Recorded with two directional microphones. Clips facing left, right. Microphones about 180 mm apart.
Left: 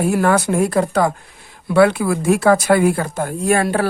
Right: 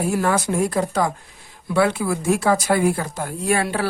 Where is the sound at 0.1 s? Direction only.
60° left (ahead or behind).